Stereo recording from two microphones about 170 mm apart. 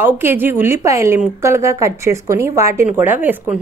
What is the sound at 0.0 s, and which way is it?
A woman's voice, 10° right (ahead or behind).